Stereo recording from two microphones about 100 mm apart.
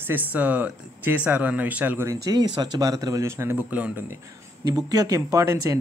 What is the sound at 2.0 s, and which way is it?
Speech, 40° right (ahead or behind).